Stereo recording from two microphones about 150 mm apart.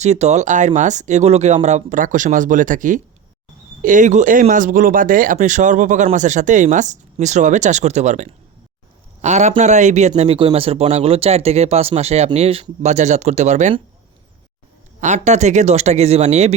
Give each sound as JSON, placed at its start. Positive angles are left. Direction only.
{"t": 0.0, "sound": "a man's voice", "side_deg": -50}
{"t": 15.0, "sound": "a man's voice", "side_deg": -50}